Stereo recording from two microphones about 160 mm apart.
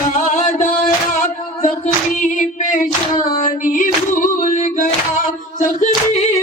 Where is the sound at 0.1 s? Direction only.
50° left (ahead or behind).